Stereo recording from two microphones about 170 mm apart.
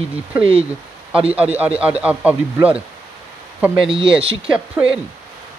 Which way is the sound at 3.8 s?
30° right (ahead or behind).